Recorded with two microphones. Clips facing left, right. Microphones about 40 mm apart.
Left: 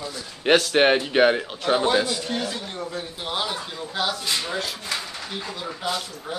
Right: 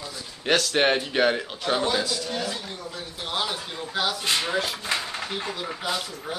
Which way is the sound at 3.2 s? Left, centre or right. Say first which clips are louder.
Even; centre.